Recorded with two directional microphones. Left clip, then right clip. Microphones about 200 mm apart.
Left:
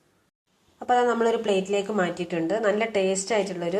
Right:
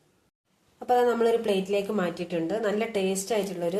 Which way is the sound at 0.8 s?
5° left (ahead or behind).